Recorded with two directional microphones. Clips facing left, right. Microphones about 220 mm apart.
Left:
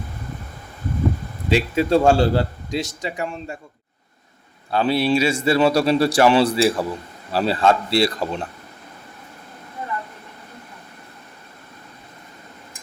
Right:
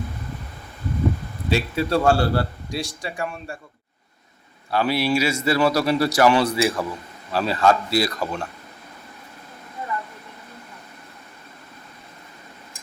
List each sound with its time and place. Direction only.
1.5 s a man's voice: 20° left (ahead or behind)
4.7 s a man's voice: 25° left (ahead or behind)